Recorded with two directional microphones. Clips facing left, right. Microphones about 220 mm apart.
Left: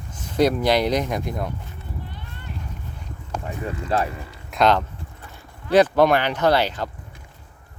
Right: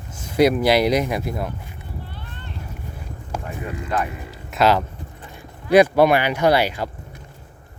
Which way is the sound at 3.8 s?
30° left (ahead or behind).